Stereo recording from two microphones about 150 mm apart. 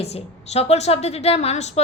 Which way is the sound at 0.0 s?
45° left (ahead or behind).